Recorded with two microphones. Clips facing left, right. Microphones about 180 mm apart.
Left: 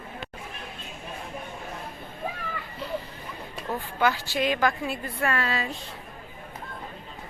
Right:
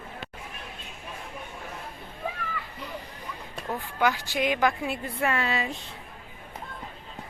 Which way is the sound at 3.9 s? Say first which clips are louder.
Left 1 dB; 15° right (ahead or behind).